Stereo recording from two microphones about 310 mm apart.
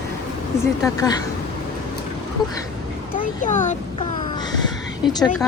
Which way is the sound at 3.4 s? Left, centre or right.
Left.